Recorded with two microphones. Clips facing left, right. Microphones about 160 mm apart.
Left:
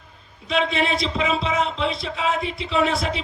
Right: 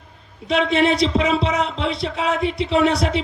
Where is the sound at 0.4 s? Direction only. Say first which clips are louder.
Right 5 dB; 70° right (ahead or behind).